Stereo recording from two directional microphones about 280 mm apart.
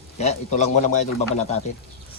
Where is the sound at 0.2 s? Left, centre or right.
Left.